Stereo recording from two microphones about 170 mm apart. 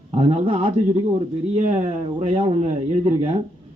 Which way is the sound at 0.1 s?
40° right (ahead or behind).